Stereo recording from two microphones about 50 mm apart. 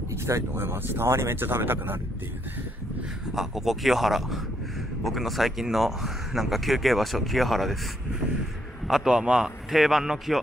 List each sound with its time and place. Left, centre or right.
0.6 s speech: right
3.3 s speech: centre
8.8 s a man's voice: centre